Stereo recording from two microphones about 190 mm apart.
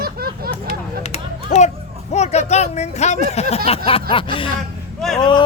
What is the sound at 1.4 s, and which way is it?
Children playing, 40° left (ahead or behind).